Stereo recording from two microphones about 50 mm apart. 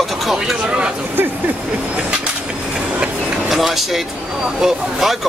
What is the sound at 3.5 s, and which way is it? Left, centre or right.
Speech, centre.